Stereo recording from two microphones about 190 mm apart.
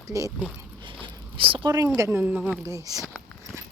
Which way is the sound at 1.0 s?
25° right (ahead or behind).